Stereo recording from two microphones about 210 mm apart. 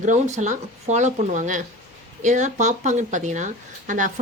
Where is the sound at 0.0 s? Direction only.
35° right (ahead or behind).